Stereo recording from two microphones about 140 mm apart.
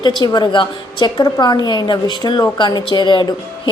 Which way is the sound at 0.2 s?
35° left (ahead or behind).